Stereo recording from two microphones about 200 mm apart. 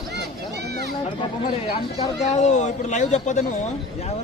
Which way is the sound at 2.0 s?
35° left (ahead or behind).